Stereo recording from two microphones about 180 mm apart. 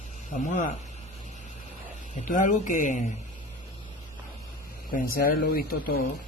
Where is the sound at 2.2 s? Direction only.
45° left (ahead or behind).